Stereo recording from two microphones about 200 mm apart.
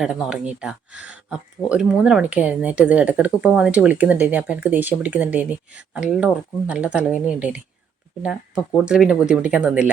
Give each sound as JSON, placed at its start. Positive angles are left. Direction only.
{"t": 0.0, "sound": "speech", "side_deg": 0}